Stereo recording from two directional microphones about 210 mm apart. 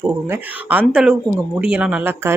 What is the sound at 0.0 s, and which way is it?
Speech, 10° right (ahead or behind).